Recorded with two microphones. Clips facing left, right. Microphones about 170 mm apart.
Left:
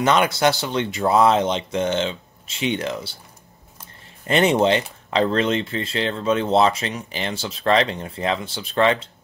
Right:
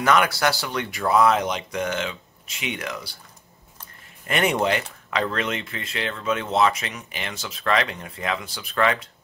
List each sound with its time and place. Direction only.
0.0 s speech: 25° left (ahead or behind)
4.3 s speech: 25° left (ahead or behind)